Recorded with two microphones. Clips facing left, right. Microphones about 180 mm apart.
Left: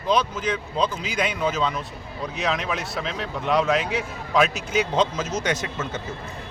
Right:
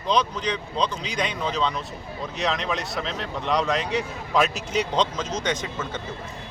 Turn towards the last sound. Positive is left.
turn(degrees=5)  # may be behind; listen again after turning